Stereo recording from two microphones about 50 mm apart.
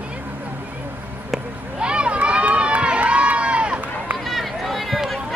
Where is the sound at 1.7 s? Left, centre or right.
Right.